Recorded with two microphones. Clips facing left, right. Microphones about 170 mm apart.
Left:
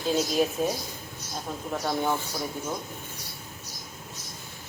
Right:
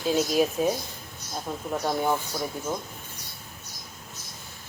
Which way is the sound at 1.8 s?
5° right (ahead or behind).